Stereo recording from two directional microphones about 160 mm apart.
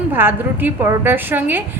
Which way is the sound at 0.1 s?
15° right (ahead or behind).